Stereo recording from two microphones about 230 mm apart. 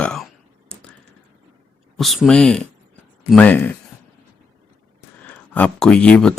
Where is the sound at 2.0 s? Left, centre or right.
Centre.